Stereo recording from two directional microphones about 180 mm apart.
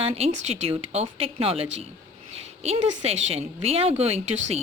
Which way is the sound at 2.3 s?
35° right (ahead or behind).